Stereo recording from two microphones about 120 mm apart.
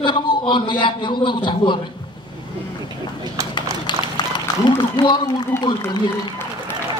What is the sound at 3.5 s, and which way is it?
Clip-clop, 40° left (ahead or behind).